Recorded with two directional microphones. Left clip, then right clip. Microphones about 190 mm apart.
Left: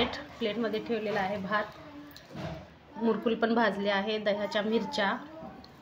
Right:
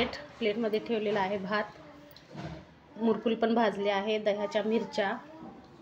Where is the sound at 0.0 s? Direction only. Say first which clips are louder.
Even; 20° right (ahead or behind).